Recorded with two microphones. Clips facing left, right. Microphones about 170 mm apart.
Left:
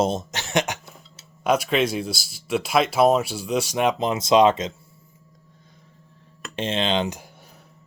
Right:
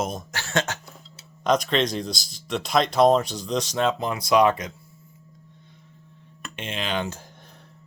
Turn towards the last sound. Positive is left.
turn(degrees=15)  # may be behind; listen again after turning